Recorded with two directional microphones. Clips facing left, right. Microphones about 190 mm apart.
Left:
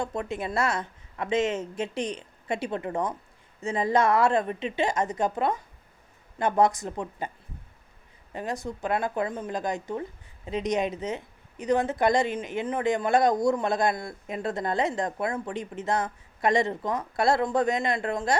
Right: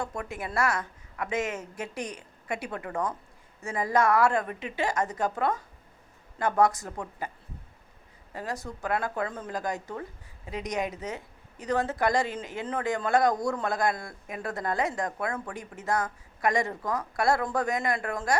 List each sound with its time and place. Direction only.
0.0 s speech: 20° left (ahead or behind)
8.3 s speech: 20° left (ahead or behind)